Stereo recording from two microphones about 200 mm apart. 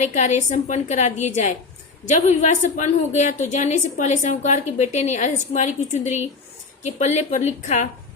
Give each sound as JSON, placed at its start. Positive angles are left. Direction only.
{"t": 0.0, "sound": "a woman's voice", "side_deg": 35}